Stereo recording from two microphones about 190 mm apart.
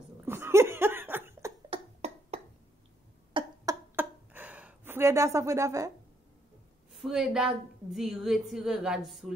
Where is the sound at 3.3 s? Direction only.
25° right (ahead or behind).